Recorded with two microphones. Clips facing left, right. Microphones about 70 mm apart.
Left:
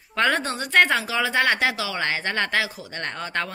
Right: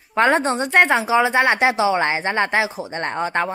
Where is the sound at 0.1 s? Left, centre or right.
Right.